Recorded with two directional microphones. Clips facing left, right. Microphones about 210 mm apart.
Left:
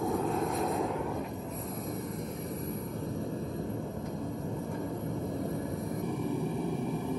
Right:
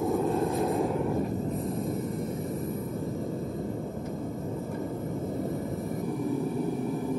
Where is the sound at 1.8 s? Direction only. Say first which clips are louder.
Right 5 dB; centre (ahead or behind).